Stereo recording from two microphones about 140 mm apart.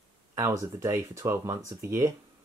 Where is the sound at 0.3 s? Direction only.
20° right (ahead or behind).